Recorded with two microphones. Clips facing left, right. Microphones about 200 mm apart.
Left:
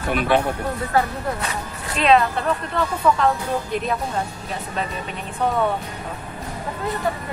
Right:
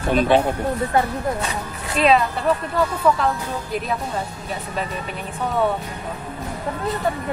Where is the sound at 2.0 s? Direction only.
5° right (ahead or behind).